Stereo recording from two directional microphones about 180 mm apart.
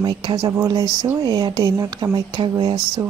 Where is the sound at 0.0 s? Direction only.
20° right (ahead or behind).